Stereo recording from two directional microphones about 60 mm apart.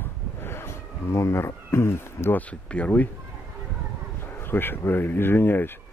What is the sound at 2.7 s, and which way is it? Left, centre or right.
Speech, left.